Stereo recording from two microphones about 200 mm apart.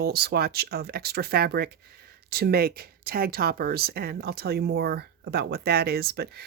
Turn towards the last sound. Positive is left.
turn(degrees=-55)  # may be behind; listen again after turning